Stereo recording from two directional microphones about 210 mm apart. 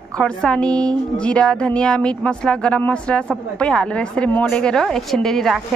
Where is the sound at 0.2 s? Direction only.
5° left (ahead or behind).